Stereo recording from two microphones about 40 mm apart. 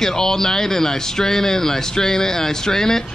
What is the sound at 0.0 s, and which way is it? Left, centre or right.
Speech, centre.